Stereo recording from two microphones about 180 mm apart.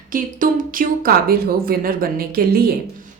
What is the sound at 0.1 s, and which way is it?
A woman's voice, 50° right (ahead or behind).